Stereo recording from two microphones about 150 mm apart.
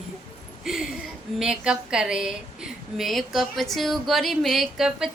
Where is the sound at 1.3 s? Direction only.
5° right (ahead or behind).